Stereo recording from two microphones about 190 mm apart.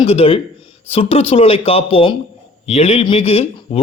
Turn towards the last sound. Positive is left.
turn(degrees=30)  # may be behind; listen again after turning